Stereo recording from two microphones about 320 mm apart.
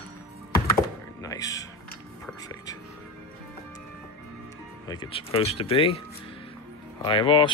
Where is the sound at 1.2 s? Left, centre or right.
Centre.